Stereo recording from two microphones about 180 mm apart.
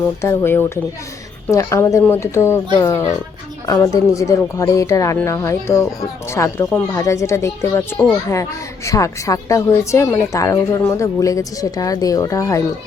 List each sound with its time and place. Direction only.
0.2 s a child's voice: 15° left (ahead or behind)